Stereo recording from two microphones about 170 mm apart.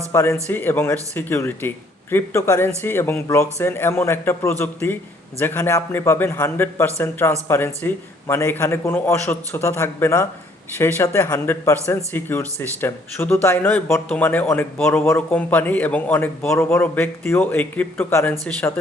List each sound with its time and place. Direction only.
0.1 s speech: 15° left (ahead or behind)